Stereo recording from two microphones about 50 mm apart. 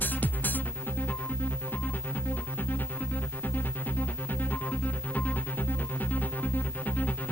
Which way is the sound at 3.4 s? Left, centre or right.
Left.